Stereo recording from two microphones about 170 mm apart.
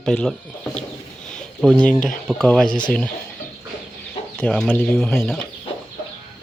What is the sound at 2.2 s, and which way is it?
Speech, 5° left (ahead or behind).